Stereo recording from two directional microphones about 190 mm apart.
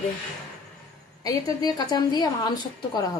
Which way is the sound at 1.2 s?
20° left (ahead or behind).